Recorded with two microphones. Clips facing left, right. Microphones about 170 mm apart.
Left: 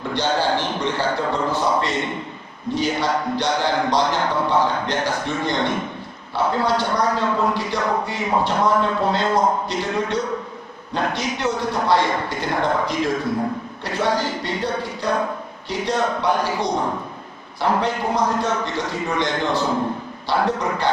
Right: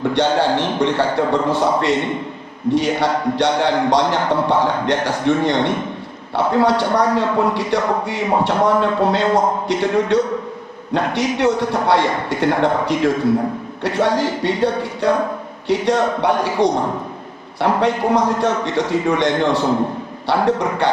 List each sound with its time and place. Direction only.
0.0 s a man's voice: 70° right (ahead or behind)